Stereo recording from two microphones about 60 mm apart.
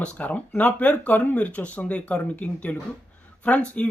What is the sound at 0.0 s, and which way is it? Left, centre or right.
Speech, left.